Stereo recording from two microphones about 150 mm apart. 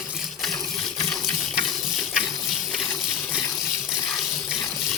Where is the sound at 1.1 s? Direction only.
Centre (ahead or behind).